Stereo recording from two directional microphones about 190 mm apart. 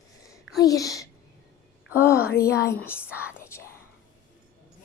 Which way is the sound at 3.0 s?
5° right (ahead or behind).